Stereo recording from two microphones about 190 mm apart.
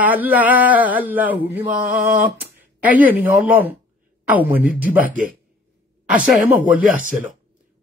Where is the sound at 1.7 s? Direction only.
50° right (ahead or behind).